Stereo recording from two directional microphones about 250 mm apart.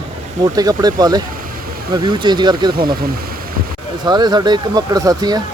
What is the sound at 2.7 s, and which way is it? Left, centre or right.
Speech, right.